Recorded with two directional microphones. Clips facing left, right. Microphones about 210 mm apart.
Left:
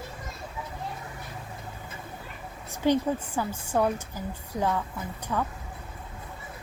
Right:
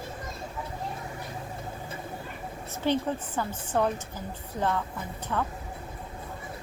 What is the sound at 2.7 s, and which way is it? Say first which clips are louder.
Speech: left 3 dB; 15° left (ahead or behind).